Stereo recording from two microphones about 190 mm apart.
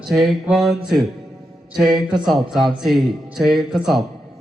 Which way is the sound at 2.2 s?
Centre (ahead or behind).